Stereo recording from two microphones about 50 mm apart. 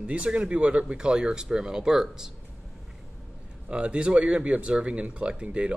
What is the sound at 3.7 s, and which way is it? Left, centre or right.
Speech, right.